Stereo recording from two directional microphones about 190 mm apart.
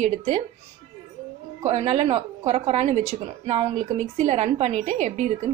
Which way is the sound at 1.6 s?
35° right (ahead or behind).